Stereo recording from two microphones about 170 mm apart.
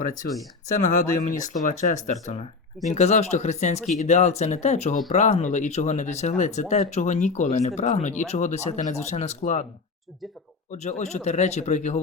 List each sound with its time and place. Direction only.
0.2 s speech: 65° left (ahead or behind)
0.8 s speech: 50° left (ahead or behind)
10.7 s speech: 45° left (ahead or behind)